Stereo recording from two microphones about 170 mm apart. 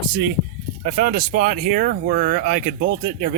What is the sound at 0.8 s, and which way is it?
Speech, 55° right (ahead or behind).